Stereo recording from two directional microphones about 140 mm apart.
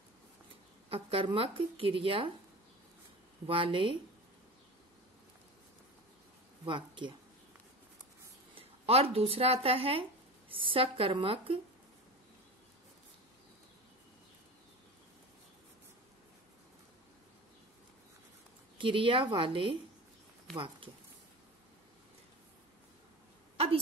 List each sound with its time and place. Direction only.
0.8 s speech: 40° right (ahead or behind)
3.4 s speech: 40° right (ahead or behind)
6.6 s speech: 35° right (ahead or behind)
8.5 s speech: 45° right (ahead or behind)
18.8 s speech: 35° right (ahead or behind)